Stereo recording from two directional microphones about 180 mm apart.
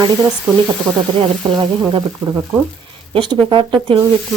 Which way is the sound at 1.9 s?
20° right (ahead or behind).